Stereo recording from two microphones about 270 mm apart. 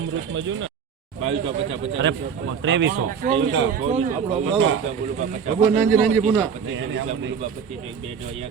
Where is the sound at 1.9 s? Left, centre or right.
Right.